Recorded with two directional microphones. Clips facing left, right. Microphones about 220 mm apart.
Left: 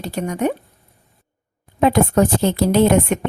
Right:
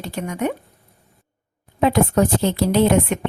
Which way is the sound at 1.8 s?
50° left (ahead or behind).